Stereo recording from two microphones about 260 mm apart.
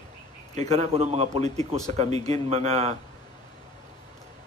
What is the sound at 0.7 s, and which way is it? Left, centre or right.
A man's voice, right.